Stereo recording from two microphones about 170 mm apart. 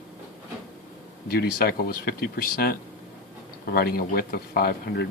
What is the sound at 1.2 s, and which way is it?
Speech, 65° left (ahead or behind).